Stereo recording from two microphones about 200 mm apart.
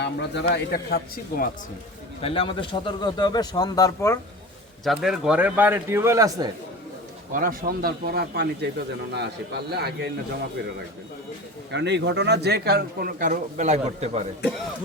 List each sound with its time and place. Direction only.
0.0 s speech: 60° left (ahead or behind)
2.2 s a man's voice: 25° left (ahead or behind)
4.8 s a man's voice: centre (ahead or behind); by 6.5 s 15° right (ahead or behind)
7.3 s a man's voice: 45° right (ahead or behind)
11.7 s a man's voice: 60° right (ahead or behind); by 14.3 s 35° right (ahead or behind)